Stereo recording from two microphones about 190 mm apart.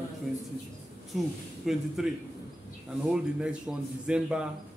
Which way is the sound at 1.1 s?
Centre (ahead or behind).